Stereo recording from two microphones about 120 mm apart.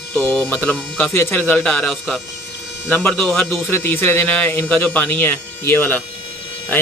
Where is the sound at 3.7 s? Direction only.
20° left (ahead or behind).